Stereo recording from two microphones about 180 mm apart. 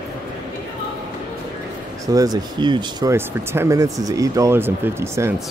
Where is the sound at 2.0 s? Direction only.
20° right (ahead or behind).